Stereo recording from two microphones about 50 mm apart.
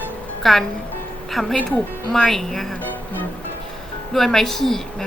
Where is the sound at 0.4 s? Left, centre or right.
Centre.